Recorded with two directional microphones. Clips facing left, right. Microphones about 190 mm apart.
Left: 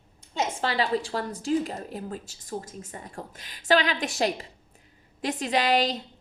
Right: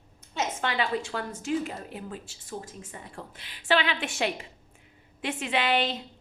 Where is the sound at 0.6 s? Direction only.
35° left (ahead or behind).